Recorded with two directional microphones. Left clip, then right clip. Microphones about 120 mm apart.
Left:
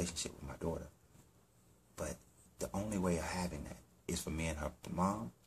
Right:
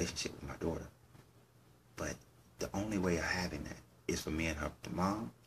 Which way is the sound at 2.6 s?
20° left (ahead or behind).